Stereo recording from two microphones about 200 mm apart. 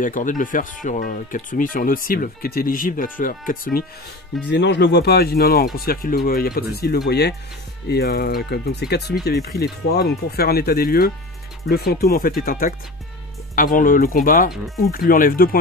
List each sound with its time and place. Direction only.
0.0 s speech: 40° left (ahead or behind)
4.5 s speech: 60° left (ahead or behind)